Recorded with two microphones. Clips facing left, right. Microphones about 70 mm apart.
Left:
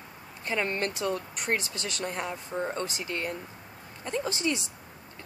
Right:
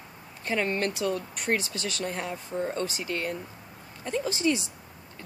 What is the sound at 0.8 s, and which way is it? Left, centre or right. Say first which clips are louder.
Speech: right 2 dB; left.